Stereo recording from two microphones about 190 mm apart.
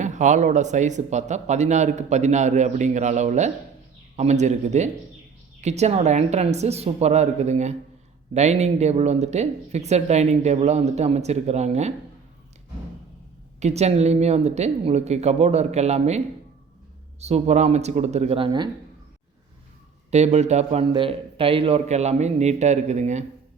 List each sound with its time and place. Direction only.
0.0 s speech: 40° right (ahead or behind)
13.6 s speech: 35° right (ahead or behind)
20.1 s speech: 35° right (ahead or behind)